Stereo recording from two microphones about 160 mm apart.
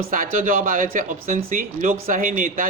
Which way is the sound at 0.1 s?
60° right (ahead or behind).